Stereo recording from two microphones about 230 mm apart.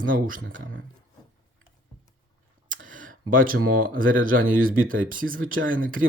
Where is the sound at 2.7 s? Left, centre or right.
Right.